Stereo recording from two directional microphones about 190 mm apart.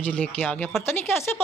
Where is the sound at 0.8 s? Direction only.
10° left (ahead or behind).